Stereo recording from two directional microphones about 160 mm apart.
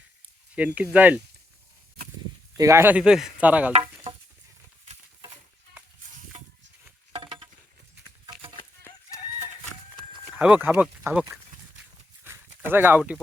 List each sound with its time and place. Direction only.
0.5 s speech: 10° right (ahead or behind)
2.6 s speech: 15° right (ahead or behind)
7.1 s a sound: 30° right (ahead or behind)
8.3 s clip-clop: 35° right (ahead or behind)
8.8 s chicken: 20° left (ahead or behind)
9.9 s livestock: 5° right (ahead or behind)